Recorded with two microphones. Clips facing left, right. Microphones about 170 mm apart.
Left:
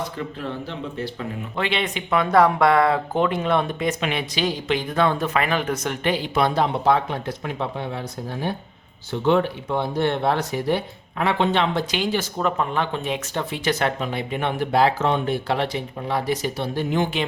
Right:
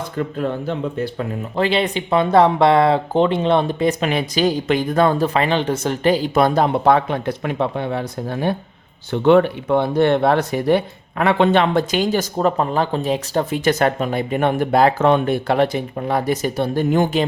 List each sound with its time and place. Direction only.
0.0 s speech: 50° right (ahead or behind)
1.5 s speech: 35° right (ahead or behind)